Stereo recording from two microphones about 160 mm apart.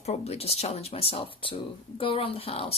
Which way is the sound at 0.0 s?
40° left (ahead or behind).